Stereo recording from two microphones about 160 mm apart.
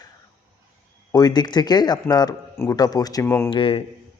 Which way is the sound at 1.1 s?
25° left (ahead or behind).